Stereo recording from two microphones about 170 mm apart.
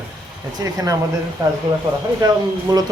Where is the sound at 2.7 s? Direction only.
25° right (ahead or behind).